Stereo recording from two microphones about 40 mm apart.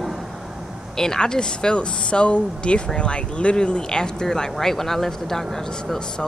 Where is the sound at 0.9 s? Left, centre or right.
Centre.